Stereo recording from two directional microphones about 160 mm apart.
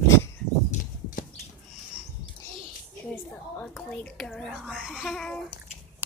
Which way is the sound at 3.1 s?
5° left (ahead or behind).